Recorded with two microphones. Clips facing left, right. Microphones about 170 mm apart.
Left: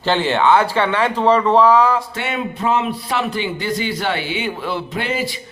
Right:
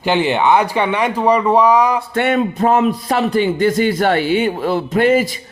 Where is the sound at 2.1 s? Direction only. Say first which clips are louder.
Right 8 dB; 55° right (ahead or behind).